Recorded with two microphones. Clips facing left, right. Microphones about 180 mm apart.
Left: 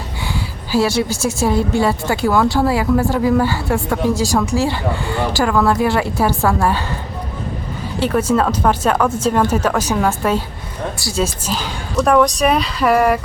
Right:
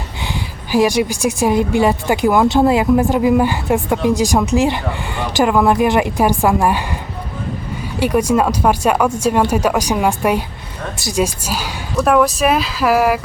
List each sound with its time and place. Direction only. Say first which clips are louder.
0.7 s speech: right 2 dB; 15° right (ahead or behind)
7.9 s speech: right 1 dB; 15° right (ahead or behind)